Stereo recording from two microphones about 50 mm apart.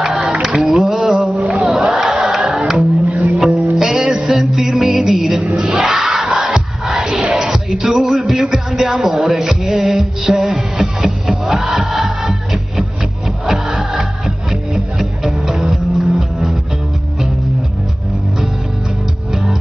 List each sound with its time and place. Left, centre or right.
0.0 s music: centre
1.5 s crowd: centre
2.2 s music: centre
5.8 s crowd: centre
6.2 s music: centre